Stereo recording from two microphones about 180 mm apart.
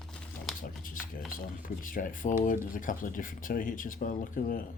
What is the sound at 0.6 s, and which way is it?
Speech, 50° left (ahead or behind).